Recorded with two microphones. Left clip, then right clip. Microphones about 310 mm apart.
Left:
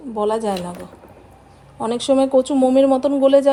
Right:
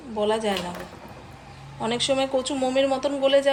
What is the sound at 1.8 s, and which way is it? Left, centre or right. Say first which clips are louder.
A woman's voice: left 6 dB; centre.